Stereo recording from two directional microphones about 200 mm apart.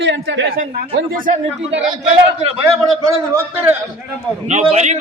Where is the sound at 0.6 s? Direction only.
40° right (ahead or behind).